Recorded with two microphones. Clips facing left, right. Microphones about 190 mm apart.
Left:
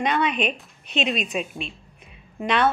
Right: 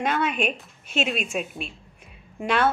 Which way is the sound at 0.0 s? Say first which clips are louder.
Left 1 dB; 5° right (ahead or behind).